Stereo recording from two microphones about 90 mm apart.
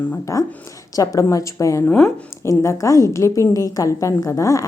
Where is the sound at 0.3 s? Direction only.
40° left (ahead or behind).